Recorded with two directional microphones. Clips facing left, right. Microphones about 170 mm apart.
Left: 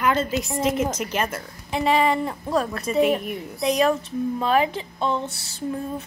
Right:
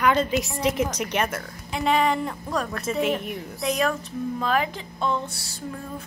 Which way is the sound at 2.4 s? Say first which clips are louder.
Left 8 dB; 30° left (ahead or behind).